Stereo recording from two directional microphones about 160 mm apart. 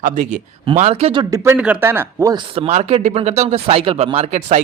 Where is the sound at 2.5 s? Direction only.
40° right (ahead or behind).